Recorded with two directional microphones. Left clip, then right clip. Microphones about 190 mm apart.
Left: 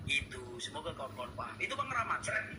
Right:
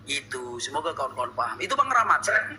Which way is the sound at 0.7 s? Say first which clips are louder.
Right 16 dB; 45° right (ahead or behind).